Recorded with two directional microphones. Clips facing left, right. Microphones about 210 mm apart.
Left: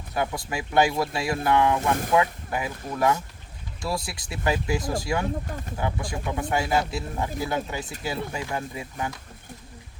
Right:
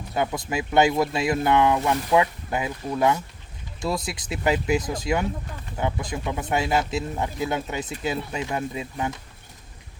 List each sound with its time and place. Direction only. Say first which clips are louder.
0.1 s speech: right 2 dB; 20° right (ahead or behind)